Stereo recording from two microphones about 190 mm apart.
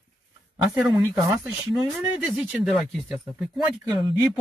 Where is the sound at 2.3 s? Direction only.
5° right (ahead or behind).